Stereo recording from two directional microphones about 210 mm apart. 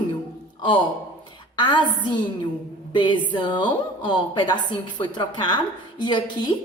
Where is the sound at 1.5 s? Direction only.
20° left (ahead or behind).